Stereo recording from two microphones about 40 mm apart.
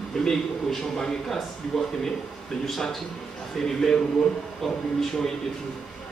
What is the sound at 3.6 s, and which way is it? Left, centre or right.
A man's voice, centre.